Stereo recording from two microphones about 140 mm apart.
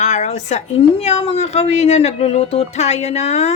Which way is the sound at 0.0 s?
55° left (ahead or behind).